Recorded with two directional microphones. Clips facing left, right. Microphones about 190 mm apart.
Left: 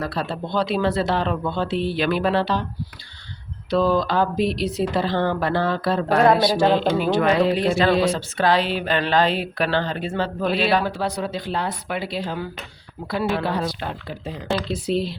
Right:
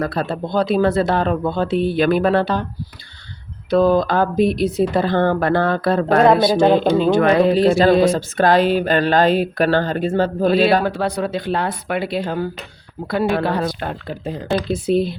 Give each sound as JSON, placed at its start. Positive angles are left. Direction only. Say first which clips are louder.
{"t": 0.0, "sound": "speech", "louder": "right 5 dB", "side_deg": -50}
{"t": 3.7, "sound": "speech", "louder": "right 5 dB", "side_deg": -50}